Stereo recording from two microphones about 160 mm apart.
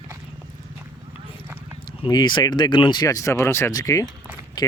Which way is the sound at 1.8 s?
25° left (ahead or behind).